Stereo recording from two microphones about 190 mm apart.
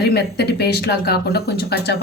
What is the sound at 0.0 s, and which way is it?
Speech, 60° left (ahead or behind).